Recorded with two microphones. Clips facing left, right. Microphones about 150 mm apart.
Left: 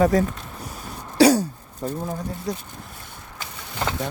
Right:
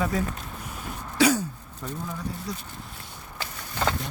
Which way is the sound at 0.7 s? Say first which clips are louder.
Left 1 dB; 35° left (ahead or behind).